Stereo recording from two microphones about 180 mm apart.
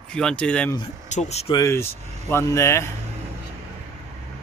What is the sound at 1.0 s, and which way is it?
Speech, 40° left (ahead or behind).